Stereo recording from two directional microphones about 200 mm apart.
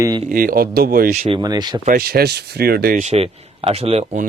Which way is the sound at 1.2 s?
25° right (ahead or behind).